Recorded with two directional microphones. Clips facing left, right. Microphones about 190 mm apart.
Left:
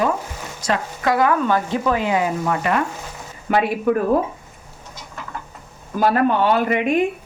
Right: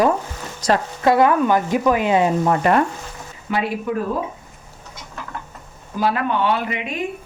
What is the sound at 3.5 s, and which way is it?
Speech, 55° left (ahead or behind).